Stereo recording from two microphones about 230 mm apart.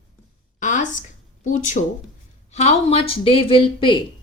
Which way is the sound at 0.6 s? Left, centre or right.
Left.